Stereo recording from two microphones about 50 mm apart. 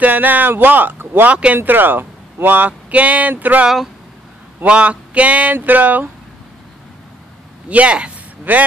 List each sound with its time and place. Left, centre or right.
0.0 s speech: right
1.2 s speech: right
1.6 s speech: right
4.6 s speech: right
7.7 s speech: right
8.5 s speech: right